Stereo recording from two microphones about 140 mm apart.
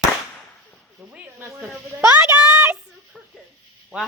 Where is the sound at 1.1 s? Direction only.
10° right (ahead or behind).